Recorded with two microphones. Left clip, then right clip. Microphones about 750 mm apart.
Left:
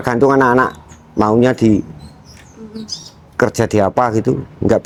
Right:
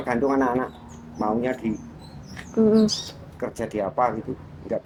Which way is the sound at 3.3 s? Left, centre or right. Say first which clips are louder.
Left 14 dB; left.